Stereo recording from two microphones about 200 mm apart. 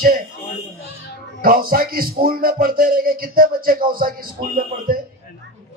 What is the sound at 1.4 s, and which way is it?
Speech, 45° right (ahead or behind).